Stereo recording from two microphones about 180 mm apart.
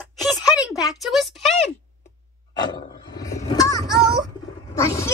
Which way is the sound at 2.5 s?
20° left (ahead or behind).